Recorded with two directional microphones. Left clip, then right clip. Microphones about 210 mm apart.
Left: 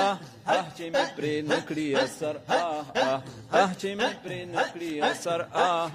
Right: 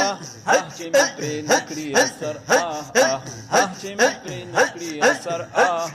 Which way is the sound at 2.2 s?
40° left (ahead or behind).